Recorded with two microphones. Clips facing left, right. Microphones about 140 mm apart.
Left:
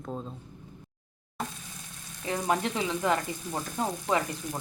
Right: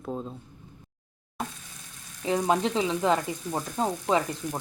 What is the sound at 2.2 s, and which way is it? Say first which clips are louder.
Frying: right 4 dB; 20° right (ahead or behind).